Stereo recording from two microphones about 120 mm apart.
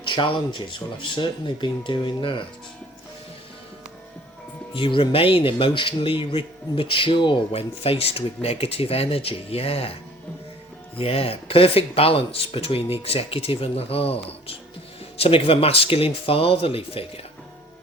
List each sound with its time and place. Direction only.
0.0 s speech: 40° left (ahead or behind)
4.7 s speech: 45° left (ahead or behind)
10.9 s speech: 50° left (ahead or behind)